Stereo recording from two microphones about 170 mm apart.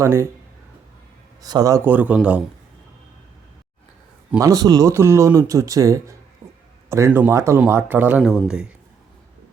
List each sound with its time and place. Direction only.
0.0 s speech: 15° right (ahead or behind)
1.4 s speech: 20° right (ahead or behind)
4.4 s speech: 20° right (ahead or behind)
6.4 s a sound: 20° right (ahead or behind)
6.9 s speech: 15° right (ahead or behind)